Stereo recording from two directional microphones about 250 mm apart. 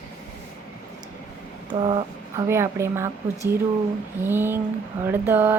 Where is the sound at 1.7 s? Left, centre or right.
Centre.